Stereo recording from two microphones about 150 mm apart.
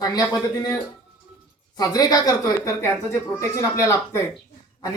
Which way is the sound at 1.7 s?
25° left (ahead or behind).